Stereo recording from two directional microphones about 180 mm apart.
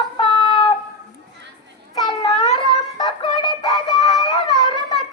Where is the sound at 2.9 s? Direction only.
25° left (ahead or behind).